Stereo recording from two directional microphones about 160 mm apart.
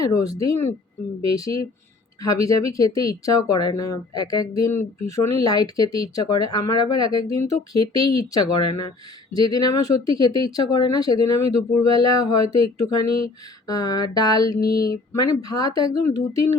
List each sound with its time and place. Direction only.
0.0 s speech: 20° left (ahead or behind)